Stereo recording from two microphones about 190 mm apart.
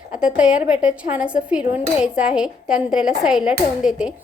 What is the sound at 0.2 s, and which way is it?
Speech, 5° right (ahead or behind).